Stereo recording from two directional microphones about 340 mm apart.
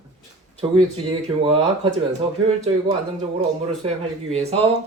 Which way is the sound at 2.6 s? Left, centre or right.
Centre.